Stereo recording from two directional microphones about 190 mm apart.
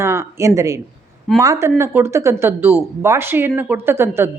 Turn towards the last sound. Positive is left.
turn(degrees=-10)  # may be behind; listen again after turning